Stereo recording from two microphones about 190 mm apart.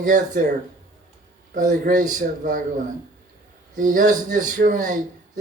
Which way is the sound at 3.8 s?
45° right (ahead or behind).